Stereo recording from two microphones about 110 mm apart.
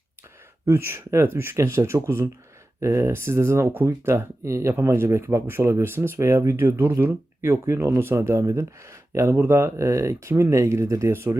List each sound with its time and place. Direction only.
0.6 s speech: 25° right (ahead or behind)